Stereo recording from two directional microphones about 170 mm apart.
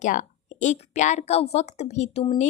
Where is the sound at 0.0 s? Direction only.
45° left (ahead or behind).